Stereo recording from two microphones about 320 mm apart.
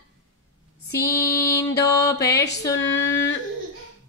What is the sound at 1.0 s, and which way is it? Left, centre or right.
Mantra, centre.